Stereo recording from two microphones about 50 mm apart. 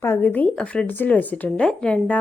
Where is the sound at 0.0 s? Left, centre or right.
Left.